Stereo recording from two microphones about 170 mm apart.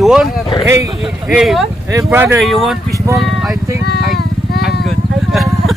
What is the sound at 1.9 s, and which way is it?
Speech, 15° right (ahead or behind).